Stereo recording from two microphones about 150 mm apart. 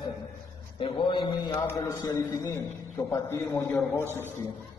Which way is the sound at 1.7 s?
25° left (ahead or behind).